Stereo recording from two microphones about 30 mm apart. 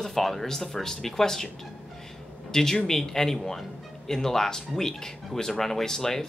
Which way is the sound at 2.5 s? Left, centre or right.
Centre.